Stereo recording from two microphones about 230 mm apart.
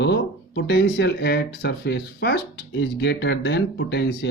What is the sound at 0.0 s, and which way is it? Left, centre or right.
Speech, left.